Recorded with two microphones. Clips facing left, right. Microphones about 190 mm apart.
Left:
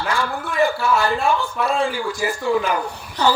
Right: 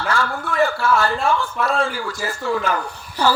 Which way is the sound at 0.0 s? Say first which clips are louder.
Right 1 dB; 15° left (ahead or behind).